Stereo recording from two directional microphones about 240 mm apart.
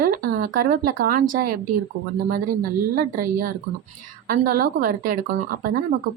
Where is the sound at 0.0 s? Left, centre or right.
Right.